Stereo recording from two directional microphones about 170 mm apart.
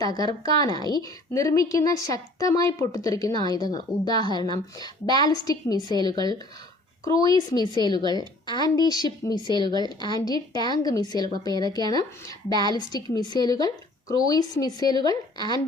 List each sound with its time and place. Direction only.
0.0 s a woman's voice: 25° left (ahead or behind)